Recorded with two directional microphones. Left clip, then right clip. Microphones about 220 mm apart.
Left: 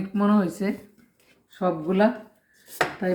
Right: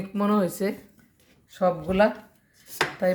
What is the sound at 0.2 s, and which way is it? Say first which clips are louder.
Speech: even; 55° right (ahead or behind).